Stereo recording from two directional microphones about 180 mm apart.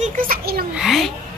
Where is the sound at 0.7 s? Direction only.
Centre (ahead or behind).